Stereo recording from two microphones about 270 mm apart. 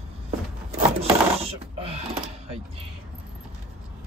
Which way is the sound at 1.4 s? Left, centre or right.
Right.